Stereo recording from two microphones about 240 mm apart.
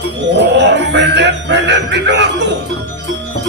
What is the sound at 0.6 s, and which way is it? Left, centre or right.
Speech, right.